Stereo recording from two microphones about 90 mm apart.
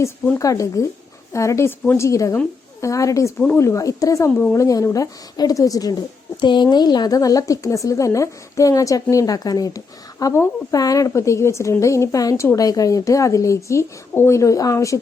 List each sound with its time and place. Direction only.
0.3 s a woman's voice: 35° left (ahead or behind)
6.4 s a woman's voice: 60° left (ahead or behind); by 15.0 s 35° left (ahead or behind)